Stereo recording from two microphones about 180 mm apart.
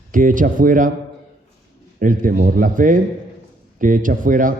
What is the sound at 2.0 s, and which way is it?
A man's voice, 45° right (ahead or behind).